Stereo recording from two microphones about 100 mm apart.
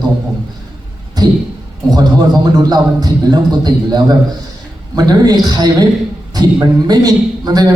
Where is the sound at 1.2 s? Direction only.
40° right (ahead or behind).